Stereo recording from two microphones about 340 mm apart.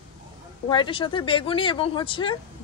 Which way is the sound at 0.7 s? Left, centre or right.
Centre.